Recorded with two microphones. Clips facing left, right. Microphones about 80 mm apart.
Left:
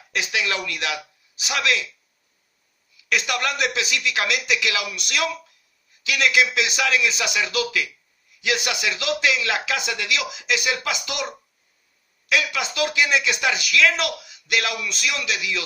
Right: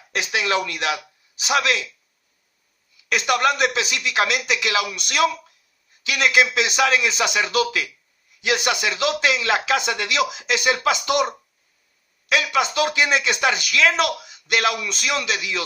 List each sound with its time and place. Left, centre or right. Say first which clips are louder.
0.1 s a sound: right 3 dB; right
0.6 s speech: right 3 dB; right
3.1 s speech: right 5 dB; right
14.8 s speech: even; right
15.1 s speech: right 2 dB; right